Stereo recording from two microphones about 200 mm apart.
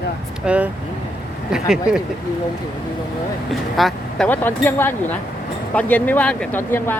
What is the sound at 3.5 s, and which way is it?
Speech, centre (ahead or behind).